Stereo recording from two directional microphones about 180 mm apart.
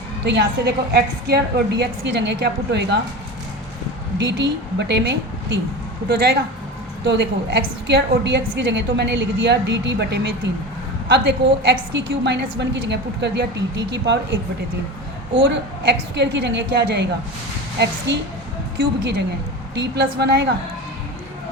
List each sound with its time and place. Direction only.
0.3 s a woman's voice: 70° right (ahead or behind)
4.2 s a woman's voice: 75° right (ahead or behind)
7.0 s a woman's voice: 75° right (ahead or behind)
15.4 s a woman's voice: 75° right (ahead or behind)
18.8 s a woman's voice: 70° right (ahead or behind)